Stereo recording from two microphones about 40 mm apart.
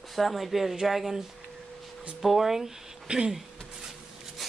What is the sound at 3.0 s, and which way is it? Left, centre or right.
Speech, right.